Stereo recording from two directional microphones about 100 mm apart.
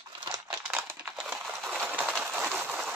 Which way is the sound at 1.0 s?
5° right (ahead or behind).